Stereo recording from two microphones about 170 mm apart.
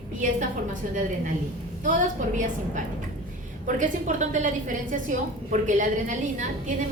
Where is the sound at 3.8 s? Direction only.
45° right (ahead or behind).